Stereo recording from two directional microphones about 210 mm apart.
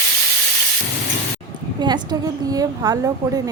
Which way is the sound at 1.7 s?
20° right (ahead or behind).